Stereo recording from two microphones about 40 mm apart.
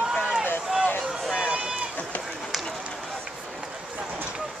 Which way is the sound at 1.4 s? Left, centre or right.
Right.